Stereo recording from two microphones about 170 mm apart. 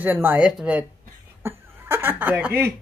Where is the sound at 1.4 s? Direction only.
15° right (ahead or behind).